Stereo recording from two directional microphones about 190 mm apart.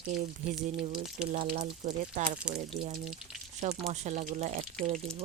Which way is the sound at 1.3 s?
40° right (ahead or behind).